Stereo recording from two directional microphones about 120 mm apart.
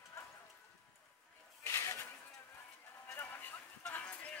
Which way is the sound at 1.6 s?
25° left (ahead or behind).